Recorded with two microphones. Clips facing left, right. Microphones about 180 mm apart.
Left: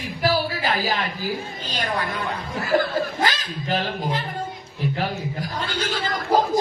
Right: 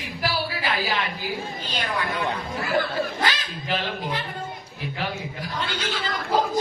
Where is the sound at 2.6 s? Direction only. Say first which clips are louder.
Left 4 dB; 40° left (ahead or behind).